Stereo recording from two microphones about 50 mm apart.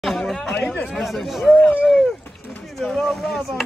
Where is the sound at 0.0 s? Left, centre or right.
Centre.